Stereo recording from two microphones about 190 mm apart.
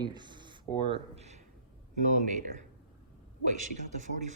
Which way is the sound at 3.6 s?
40° right (ahead or behind).